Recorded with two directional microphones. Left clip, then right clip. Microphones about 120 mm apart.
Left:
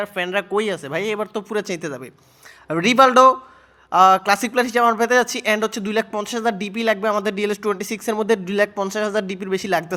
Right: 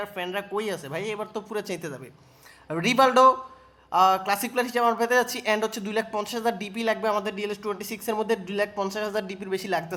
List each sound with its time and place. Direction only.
0.0 s speech: 40° left (ahead or behind)
7.3 s speech: 40° left (ahead or behind)